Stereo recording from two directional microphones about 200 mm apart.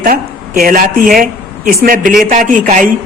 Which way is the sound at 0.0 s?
45° right (ahead or behind).